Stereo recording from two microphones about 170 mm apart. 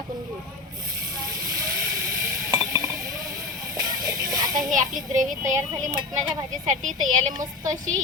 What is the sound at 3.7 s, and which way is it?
Music, 20° right (ahead or behind).